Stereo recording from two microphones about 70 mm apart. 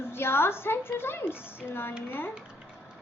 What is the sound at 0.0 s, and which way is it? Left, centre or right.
A woman's voice, left.